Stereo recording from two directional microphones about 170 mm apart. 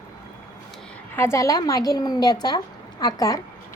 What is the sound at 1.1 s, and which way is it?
A woman's voice, 15° left (ahead or behind).